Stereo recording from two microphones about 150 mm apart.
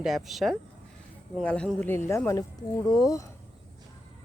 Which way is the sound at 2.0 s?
20° left (ahead or behind).